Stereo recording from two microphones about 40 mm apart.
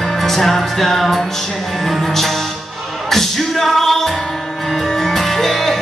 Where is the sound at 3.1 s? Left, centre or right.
Centre.